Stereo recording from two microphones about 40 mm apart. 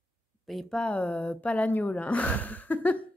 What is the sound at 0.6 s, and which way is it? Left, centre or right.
Speech, left.